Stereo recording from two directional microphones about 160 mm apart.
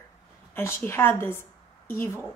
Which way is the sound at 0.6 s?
15° left (ahead or behind).